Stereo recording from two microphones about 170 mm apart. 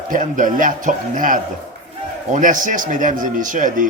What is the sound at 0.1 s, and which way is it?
A man's voice, 50° right (ahead or behind).